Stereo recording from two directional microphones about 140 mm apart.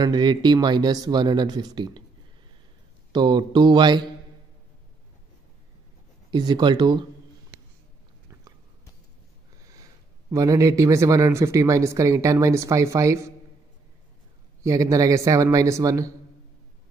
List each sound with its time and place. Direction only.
0.0 s speech: 30° right (ahead or behind)
3.1 s speech: 30° right (ahead or behind)
6.3 s speech: 30° right (ahead or behind)
10.3 s speech: 25° right (ahead or behind)
14.6 s speech: 25° right (ahead or behind)